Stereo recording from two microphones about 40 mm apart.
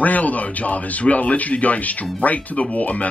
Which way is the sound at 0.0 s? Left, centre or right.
Left.